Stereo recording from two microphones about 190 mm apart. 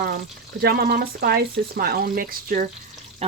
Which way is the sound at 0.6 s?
55° right (ahead or behind).